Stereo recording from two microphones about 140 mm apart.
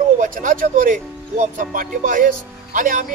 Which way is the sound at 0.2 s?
70° right (ahead or behind).